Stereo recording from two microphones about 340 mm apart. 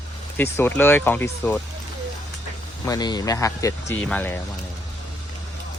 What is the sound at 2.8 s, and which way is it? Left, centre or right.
Speech, centre.